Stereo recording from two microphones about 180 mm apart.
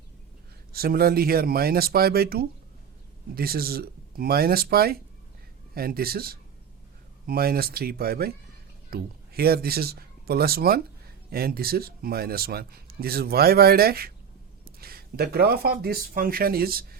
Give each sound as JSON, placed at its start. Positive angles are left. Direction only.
{"t": 0.7, "sound": "speech", "side_deg": -55}